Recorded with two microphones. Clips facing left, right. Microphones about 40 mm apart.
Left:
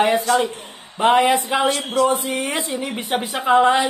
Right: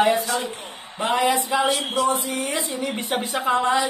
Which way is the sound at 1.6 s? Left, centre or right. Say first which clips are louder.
Left 3 dB; centre.